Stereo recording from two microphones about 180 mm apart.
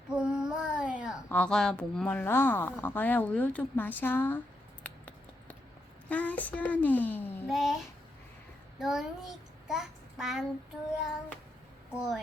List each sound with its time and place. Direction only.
0.1 s child singing: 5° right (ahead or behind)
1.3 s speech: 5° left (ahead or behind)
4.8 s a sound: 10° left (ahead or behind)
6.1 s speech: 10° left (ahead or behind)
7.4 s a sound: centre (ahead or behind)
8.8 s child singing: centre (ahead or behind)
11.9 s a woman's voice: 5° right (ahead or behind)